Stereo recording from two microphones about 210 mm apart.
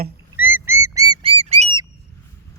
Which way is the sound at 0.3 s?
10° right (ahead or behind).